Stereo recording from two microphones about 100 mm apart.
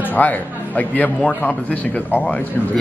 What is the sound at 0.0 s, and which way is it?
A man's voice, 15° left (ahead or behind).